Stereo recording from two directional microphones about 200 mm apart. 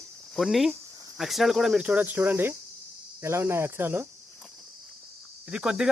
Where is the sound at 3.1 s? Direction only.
10° right (ahead or behind).